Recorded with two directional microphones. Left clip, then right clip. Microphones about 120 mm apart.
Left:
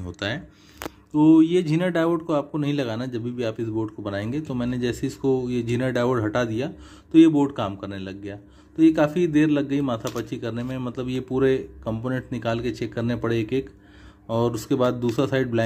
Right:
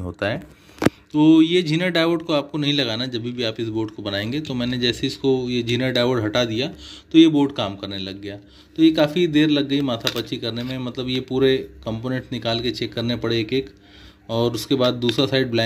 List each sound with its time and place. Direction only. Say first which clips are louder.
0.2 s speech: right 5 dB; 20° right (ahead or behind)
1.1 s a man's voice: right 1 dB; centre (ahead or behind)
1.5 s speech: right 3 dB; 10° left (ahead or behind)
1.8 s a man's voice: right 3 dB; 5° right (ahead or behind)
4.0 s a man's voice: right 3 dB; 5° right (ahead or behind)
5.8 s a man's voice: right 2 dB; 5° right (ahead or behind)
7.4 s a man's voice: right 3 dB; 5° right (ahead or behind)